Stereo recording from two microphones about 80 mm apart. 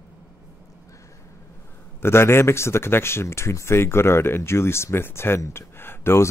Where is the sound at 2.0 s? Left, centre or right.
Left.